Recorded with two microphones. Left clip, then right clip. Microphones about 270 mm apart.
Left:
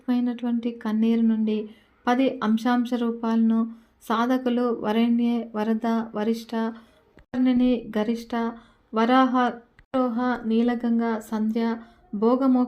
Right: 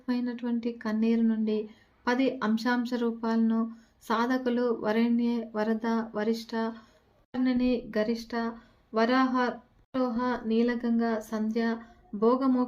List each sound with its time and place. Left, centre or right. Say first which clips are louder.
0.0 s speech: left 6 dB; centre